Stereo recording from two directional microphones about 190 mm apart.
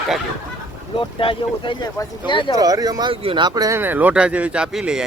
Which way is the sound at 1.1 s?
25° left (ahead or behind).